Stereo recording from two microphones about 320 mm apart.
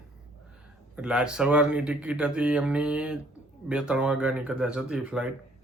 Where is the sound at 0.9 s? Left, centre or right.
Centre.